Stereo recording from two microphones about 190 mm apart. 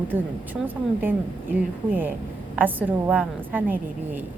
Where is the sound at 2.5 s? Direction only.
10° right (ahead or behind).